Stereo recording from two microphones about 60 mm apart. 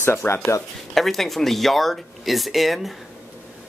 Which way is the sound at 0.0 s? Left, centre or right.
Left.